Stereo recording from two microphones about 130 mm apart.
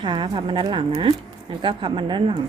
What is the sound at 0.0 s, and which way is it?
Speech, 35° right (ahead or behind).